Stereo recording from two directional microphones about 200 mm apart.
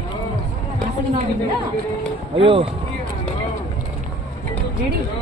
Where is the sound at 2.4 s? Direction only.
25° right (ahead or behind).